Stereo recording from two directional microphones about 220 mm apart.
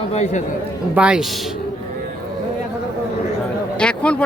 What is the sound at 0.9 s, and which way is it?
Speech, 5° right (ahead or behind).